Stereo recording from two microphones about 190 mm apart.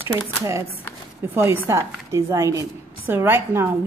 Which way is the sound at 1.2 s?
10° right (ahead or behind).